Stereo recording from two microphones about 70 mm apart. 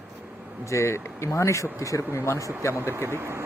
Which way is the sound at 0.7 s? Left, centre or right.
Left.